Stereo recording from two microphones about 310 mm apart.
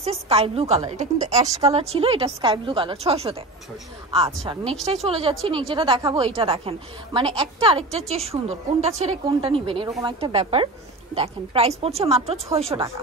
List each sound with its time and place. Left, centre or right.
0.0 s a woman's voice: centre